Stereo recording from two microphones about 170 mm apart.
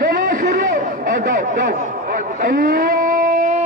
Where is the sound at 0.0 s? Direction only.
55° right (ahead or behind).